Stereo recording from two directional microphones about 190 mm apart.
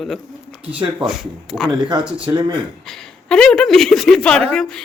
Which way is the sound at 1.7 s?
25° right (ahead or behind).